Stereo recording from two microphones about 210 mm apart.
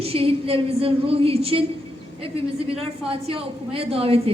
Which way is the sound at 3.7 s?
25° right (ahead or behind).